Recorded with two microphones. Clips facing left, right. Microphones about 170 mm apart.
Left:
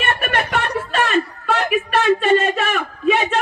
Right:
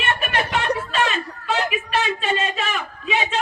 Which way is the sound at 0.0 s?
55° left (ahead or behind).